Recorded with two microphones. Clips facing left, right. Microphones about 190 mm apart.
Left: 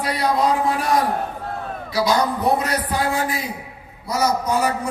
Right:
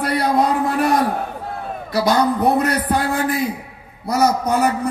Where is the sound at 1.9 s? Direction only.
55° right (ahead or behind).